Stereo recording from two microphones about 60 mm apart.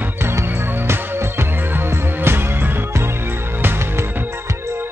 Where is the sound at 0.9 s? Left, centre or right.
Right.